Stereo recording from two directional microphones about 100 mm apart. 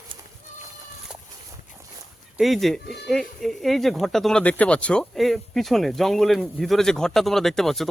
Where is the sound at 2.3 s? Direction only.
Centre (ahead or behind).